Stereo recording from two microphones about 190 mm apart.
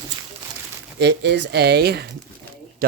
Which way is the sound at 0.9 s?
65° right (ahead or behind).